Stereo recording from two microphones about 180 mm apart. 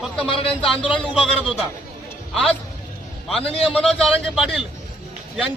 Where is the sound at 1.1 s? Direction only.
Centre (ahead or behind).